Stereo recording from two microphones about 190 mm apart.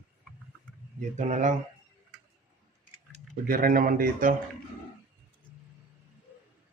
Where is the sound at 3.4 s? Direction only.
50° right (ahead or behind).